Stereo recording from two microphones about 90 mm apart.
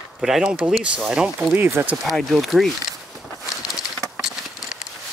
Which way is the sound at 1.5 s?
25° right (ahead or behind).